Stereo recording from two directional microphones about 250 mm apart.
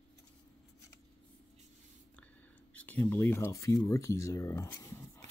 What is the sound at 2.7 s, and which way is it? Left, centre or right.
Speech, centre.